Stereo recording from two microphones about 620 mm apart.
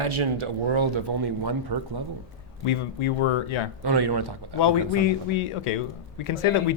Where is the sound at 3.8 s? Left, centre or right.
Right.